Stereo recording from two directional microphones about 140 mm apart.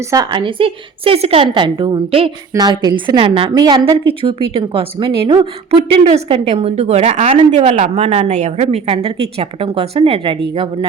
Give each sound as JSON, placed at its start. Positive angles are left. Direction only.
{"t": 0.1, "sound": "a woman's voice", "side_deg": -30}
{"t": 2.5, "sound": "a woman's voice", "side_deg": -30}
{"t": 3.2, "sound": "a woman's voice", "side_deg": -40}
{"t": 3.5, "sound": "a woman's voice", "side_deg": -30}
{"t": 6.1, "sound": "a woman's voice", "side_deg": -45}